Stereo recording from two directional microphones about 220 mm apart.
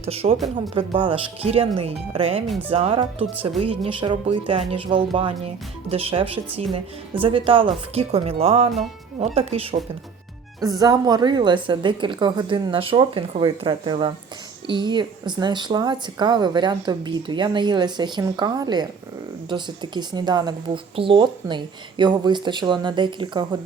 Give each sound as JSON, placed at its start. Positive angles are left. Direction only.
{"t": 0.0, "sound": "speech", "side_deg": -25}
{"t": 2.5, "sound": "speech", "side_deg": -10}
{"t": 2.7, "sound": "speech", "side_deg": -25}
{"t": 10.8, "sound": "speech", "side_deg": -15}